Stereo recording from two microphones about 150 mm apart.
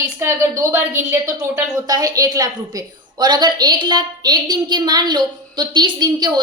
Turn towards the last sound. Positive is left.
turn(degrees=-30)  # may be behind; listen again after turning